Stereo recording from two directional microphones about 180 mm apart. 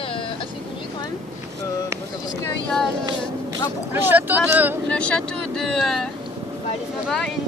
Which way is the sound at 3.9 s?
10° right (ahead or behind).